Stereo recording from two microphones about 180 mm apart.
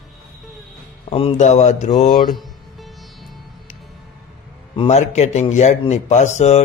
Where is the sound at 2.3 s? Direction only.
Centre (ahead or behind).